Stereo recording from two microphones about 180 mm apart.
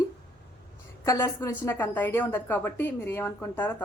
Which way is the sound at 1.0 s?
15° left (ahead or behind).